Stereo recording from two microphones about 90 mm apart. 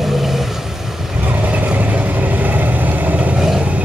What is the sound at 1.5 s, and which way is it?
Vehicle, 15° right (ahead or behind).